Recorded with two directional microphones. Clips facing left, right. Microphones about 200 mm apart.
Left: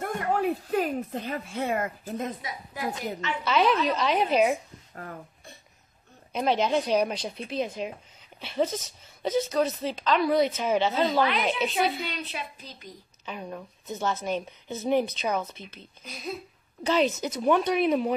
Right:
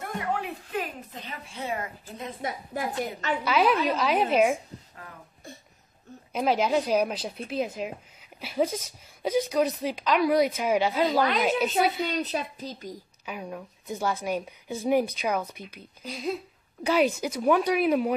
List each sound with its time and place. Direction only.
0.0 s a woman's voice: 45° left (ahead or behind)
2.4 s a woman's voice: 45° right (ahead or behind)
3.4 s speech: 5° right (ahead or behind)
6.3 s speech: 5° right (ahead or behind)
12.1 s a woman's voice: 40° right (ahead or behind)
13.2 s speech: 10° right (ahead or behind)
16.8 s speech: 10° right (ahead or behind)